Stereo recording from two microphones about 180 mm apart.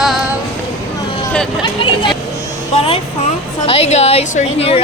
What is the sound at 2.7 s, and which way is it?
A woman's voice, 30° left (ahead or behind).